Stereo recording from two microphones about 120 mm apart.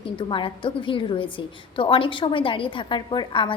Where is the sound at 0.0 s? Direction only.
45° left (ahead or behind).